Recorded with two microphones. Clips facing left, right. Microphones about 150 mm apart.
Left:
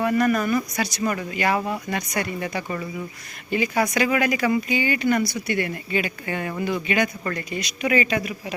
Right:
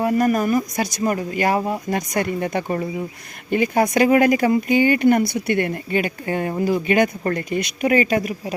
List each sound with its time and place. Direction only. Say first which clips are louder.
0.0 s speech: right 2 dB; 40° right (ahead or behind)